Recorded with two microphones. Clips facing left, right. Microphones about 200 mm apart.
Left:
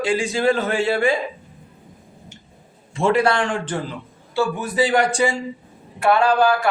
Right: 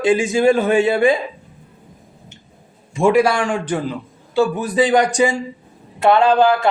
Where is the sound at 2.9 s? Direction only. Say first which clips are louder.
Right 4 dB; 15° right (ahead or behind).